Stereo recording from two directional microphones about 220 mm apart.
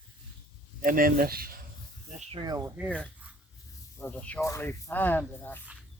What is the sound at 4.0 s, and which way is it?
Speech, 5° left (ahead or behind).